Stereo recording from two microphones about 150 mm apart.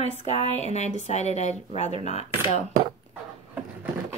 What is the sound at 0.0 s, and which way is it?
Speech, 45° left (ahead or behind).